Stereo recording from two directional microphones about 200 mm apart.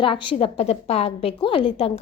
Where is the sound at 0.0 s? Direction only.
25° left (ahead or behind).